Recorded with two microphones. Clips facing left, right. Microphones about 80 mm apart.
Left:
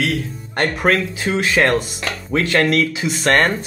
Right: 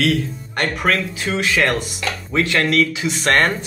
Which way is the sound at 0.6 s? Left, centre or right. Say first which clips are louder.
Left 2 dB; left.